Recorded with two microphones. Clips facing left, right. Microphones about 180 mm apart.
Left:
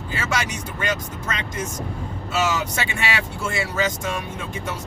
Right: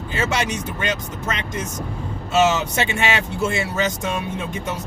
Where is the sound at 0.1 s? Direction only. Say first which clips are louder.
Right 4 dB; 25° right (ahead or behind).